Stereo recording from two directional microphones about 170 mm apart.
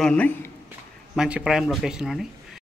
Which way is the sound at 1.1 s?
5° right (ahead or behind).